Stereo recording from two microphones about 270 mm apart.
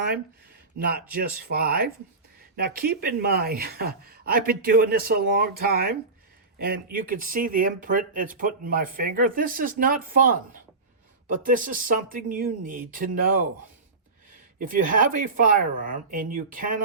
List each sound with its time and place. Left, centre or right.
0.8 s speech: right
14.6 s speech: right